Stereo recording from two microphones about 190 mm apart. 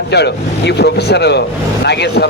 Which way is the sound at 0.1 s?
60° left (ahead or behind).